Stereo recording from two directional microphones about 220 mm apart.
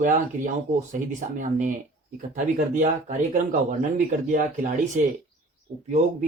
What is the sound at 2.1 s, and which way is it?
Speech, 35° right (ahead or behind).